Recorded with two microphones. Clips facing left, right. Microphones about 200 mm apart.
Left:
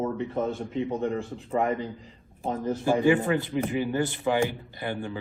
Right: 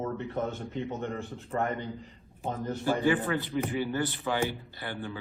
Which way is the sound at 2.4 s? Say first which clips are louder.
Left 4 dB; 15° left (ahead or behind).